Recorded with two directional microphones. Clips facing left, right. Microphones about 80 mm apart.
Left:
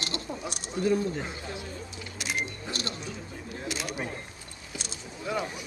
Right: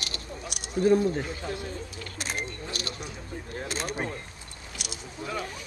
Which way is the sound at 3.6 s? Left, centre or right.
Right.